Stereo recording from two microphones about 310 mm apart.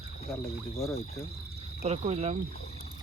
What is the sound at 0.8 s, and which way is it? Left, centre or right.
Speech, centre.